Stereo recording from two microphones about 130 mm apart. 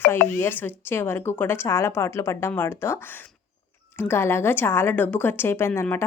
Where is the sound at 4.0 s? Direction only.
20° left (ahead or behind).